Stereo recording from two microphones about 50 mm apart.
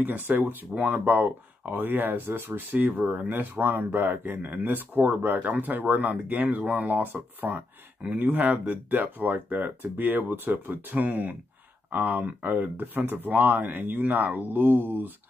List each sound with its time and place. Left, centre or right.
0.0 s speech: right